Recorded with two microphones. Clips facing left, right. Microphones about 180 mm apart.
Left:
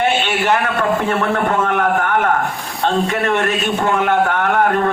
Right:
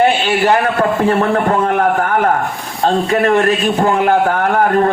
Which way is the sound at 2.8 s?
35° right (ahead or behind).